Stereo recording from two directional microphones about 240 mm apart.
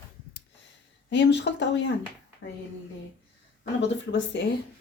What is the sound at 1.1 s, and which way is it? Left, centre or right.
Speech, left.